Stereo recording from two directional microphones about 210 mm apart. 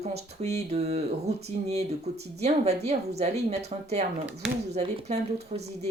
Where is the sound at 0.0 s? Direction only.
30° right (ahead or behind).